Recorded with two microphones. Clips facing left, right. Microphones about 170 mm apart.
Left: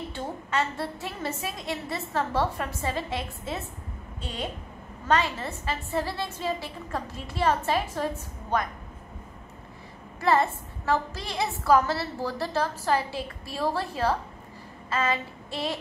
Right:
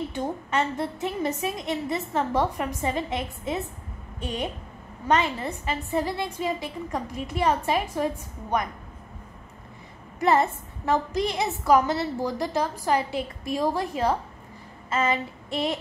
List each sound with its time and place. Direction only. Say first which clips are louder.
0.1 s a woman's voice: right 3 dB; 15° right (ahead or behind)
10.2 s a woman's voice: right 2 dB; 20° right (ahead or behind)
14.9 s child singing: right 2 dB; 20° right (ahead or behind)